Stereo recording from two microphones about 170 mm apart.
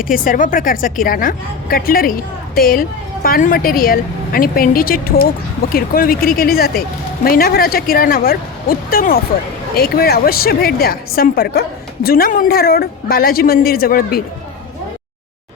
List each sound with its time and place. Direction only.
0.0 s a woman's voice: 55° left (ahead or behind)